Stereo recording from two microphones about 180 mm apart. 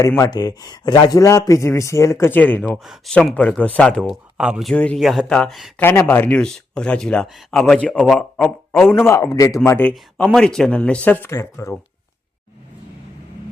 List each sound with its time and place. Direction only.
0.0 s speech: 15° left (ahead or behind); by 4.7 s 5° right (ahead or behind)
4.7 s speech: 5° left (ahead or behind)
5.8 s speech: 15° left (ahead or behind)
9.0 s speech: 15° left (ahead or behind)